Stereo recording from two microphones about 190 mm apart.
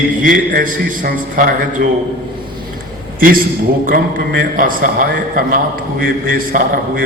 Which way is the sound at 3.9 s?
50° right (ahead or behind).